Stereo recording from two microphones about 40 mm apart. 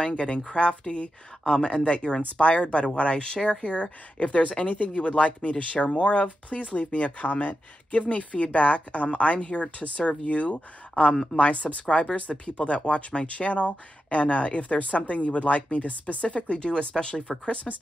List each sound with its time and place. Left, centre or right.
0.0 s speech: left